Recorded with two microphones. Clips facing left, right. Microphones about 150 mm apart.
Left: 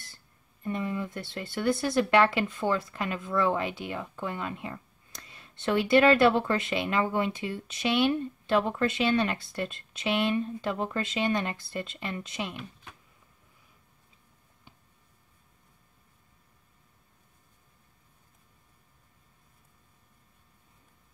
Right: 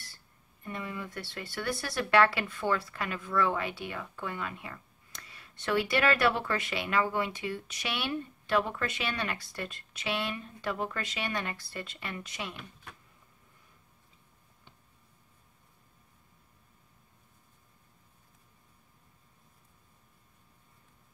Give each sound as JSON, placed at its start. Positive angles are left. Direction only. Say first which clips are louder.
{"t": 0.8, "sound": "speech", "louder": "left 6 dB", "side_deg": 25}